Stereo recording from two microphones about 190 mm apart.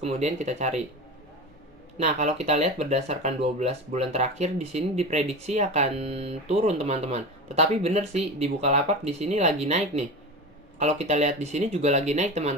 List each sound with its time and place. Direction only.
0.0 s speech: 35° right (ahead or behind)
2.0 s speech: 35° right (ahead or behind)